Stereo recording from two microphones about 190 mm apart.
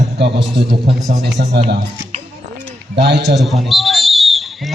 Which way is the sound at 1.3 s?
65° right (ahead or behind).